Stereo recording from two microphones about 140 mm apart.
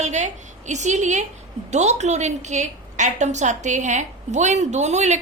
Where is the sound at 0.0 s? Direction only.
55° right (ahead or behind).